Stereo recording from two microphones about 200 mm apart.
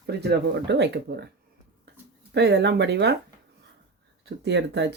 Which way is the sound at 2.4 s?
60° right (ahead or behind).